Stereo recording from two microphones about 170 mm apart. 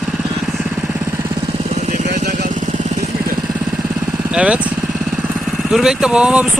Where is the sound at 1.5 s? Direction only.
40° right (ahead or behind).